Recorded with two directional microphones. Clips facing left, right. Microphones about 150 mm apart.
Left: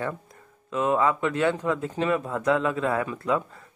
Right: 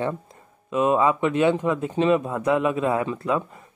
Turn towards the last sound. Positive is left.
turn(degrees=-20)  # may be behind; listen again after turning